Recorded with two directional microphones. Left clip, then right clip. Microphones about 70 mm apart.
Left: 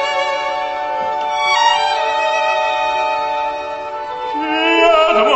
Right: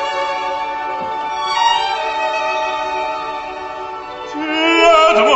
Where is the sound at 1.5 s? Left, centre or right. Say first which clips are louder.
Left 1 dB; centre.